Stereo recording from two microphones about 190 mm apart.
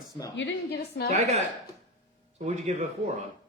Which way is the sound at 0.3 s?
65° left (ahead or behind).